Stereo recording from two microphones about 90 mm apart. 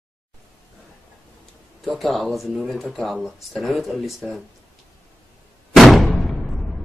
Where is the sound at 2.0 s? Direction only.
Centre (ahead or behind).